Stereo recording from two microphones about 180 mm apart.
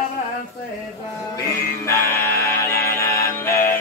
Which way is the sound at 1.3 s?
15° left (ahead or behind).